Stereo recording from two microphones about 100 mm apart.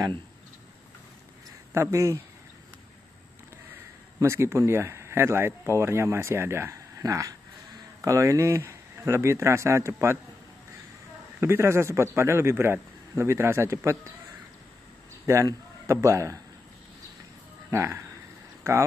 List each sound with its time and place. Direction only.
1.7 s speech: 25° right (ahead or behind)
4.2 s speech: 25° right (ahead or behind)
11.3 s speech: 25° right (ahead or behind)
15.2 s a man's voice: 25° right (ahead or behind)
17.6 s speech: 30° right (ahead or behind)